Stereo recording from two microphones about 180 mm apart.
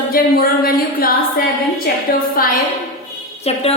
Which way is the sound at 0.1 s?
55° left (ahead or behind).